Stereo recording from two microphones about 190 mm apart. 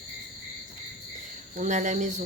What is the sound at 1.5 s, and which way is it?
Speech, 40° right (ahead or behind).